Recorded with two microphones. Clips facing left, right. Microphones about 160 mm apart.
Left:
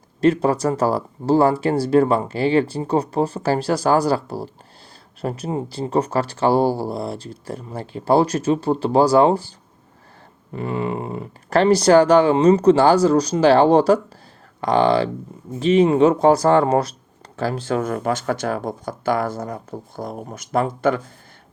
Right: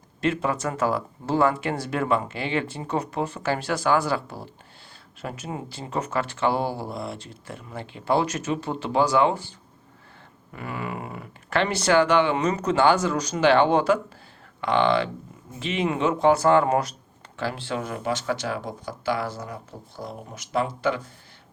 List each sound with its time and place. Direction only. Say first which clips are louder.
0.2 s speech: left 8 dB; 35° left (ahead or behind)